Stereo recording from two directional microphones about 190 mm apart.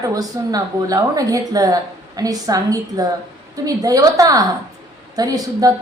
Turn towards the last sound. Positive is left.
turn(degrees=-20)  # may be behind; listen again after turning